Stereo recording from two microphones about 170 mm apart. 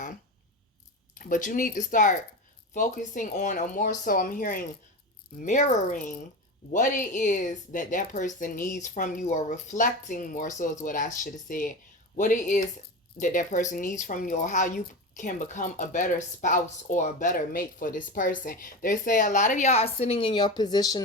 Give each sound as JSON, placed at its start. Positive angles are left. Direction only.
{"t": 1.1, "sound": "speech", "side_deg": 50}